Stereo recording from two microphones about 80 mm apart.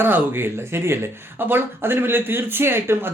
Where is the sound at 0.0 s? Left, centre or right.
Right.